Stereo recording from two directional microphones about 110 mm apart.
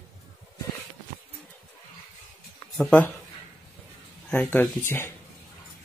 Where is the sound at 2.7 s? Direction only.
10° left (ahead or behind).